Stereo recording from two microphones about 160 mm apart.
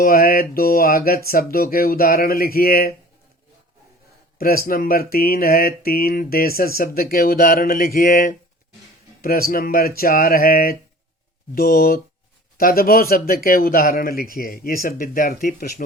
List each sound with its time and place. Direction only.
0.0 s a man's voice: 65° left (ahead or behind)
4.4 s a man's voice: 65° left (ahead or behind)